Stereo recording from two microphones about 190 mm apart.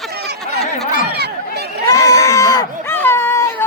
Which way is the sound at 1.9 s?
20° left (ahead or behind).